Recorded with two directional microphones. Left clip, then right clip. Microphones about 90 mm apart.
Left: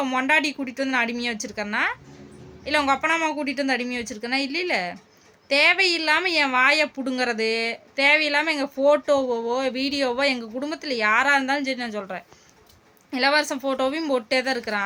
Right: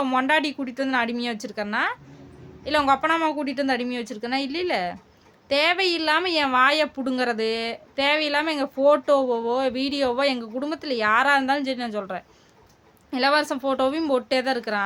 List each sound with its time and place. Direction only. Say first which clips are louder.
0.0 s speech: even; 35° right (ahead or behind)